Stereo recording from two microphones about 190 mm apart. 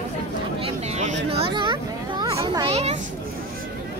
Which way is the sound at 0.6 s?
40° right (ahead or behind).